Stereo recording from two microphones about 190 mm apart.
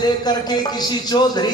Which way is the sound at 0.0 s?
20° left (ahead or behind).